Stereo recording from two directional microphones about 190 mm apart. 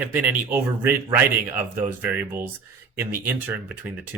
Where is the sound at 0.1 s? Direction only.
10° right (ahead or behind).